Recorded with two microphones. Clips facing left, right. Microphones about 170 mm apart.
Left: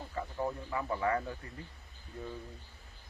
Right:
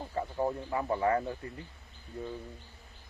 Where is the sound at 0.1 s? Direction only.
30° right (ahead or behind).